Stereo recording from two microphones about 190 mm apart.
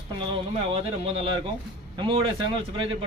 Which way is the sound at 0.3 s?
30° right (ahead or behind).